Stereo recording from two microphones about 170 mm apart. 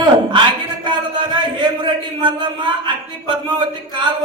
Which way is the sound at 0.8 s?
25° right (ahead or behind).